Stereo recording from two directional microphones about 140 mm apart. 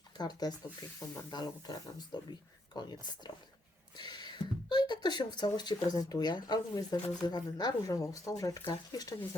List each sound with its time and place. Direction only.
0.2 s speech: 30° left (ahead or behind)